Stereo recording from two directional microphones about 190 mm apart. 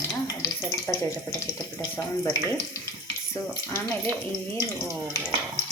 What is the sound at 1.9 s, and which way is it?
Speech, 15° left (ahead or behind).